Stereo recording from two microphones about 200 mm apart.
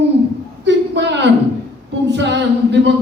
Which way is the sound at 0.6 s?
60° right (ahead or behind).